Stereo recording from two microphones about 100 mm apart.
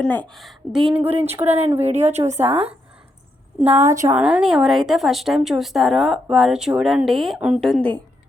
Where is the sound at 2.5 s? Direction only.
75° right (ahead or behind).